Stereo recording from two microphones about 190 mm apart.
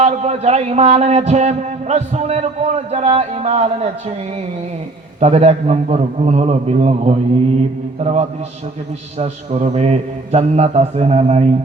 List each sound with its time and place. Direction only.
0.0 s a man's voice: 35° right (ahead or behind)
5.2 s a man's voice: 35° right (ahead or behind)